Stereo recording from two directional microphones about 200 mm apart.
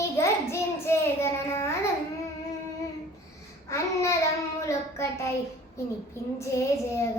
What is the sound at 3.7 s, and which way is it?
A child's voice, 15° left (ahead or behind).